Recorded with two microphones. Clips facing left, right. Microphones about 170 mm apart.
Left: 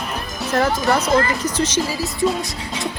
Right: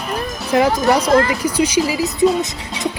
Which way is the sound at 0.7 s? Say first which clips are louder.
Right 4 dB; 20° right (ahead or behind).